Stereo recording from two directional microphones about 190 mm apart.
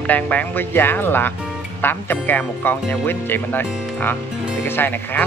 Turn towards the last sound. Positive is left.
turn(degrees=10)  # may be behind; listen again after turning